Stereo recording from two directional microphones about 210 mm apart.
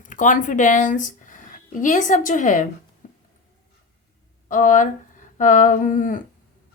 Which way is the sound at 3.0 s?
35° left (ahead or behind).